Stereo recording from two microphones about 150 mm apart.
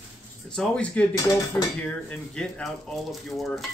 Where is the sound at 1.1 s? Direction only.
20° left (ahead or behind).